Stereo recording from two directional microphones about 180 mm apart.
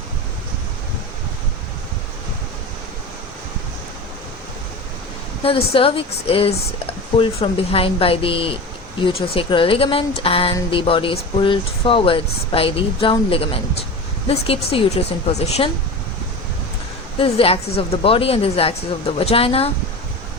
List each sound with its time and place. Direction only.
5.4 s speech: 30° left (ahead or behind)
17.2 s speech: 30° left (ahead or behind)